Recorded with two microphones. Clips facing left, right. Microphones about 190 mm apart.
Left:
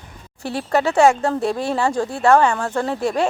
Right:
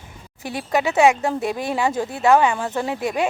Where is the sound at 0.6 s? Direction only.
15° right (ahead or behind).